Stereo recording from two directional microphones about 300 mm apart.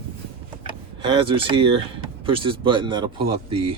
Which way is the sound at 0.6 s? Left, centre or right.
Centre.